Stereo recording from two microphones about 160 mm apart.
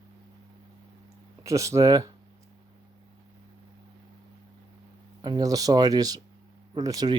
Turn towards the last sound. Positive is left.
turn(degrees=-20)  # may be behind; listen again after turning